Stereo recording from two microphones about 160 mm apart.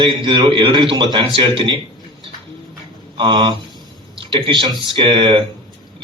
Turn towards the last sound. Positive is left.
turn(degrees=-30)  # may be behind; listen again after turning